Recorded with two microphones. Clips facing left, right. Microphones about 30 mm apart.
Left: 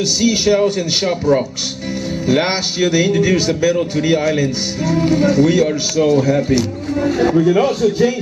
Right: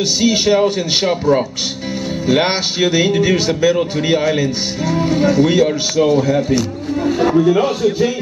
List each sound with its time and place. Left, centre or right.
0.2 s speech: centre